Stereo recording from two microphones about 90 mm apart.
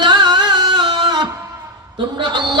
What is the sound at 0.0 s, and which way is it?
Music, 55° right (ahead or behind).